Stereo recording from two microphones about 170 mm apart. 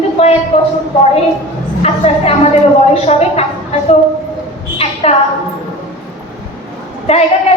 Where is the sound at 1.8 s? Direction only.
35° left (ahead or behind).